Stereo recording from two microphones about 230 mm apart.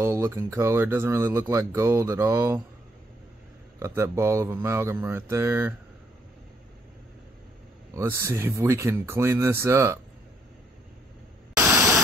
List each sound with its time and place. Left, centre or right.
0.0 s speech: centre
3.8 s speech: centre
7.9 s speech: centre
11.5 s a sound: centre